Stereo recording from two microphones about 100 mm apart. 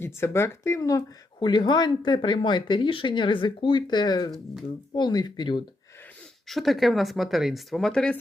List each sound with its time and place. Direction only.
0.0 s speech: 25° left (ahead or behind)
1.4 s speech: 50° left (ahead or behind)
6.5 s speech: centre (ahead or behind)